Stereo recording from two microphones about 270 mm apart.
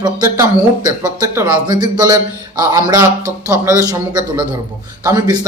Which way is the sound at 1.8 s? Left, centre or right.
Centre.